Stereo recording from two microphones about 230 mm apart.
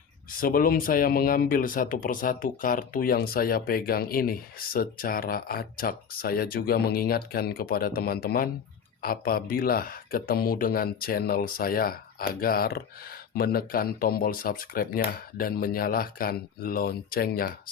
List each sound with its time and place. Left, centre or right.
0.3 s speech: left